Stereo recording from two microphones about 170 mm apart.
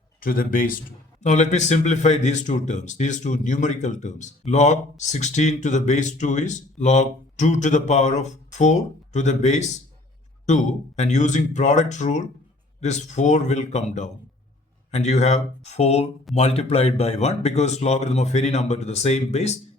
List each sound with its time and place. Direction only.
0.2 s speech: 55° left (ahead or behind); by 19.5 s 40° left (ahead or behind)